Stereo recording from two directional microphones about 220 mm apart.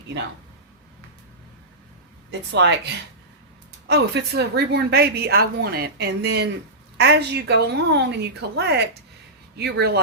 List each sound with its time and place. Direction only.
2.5 s a woman's voice: 50° right (ahead or behind)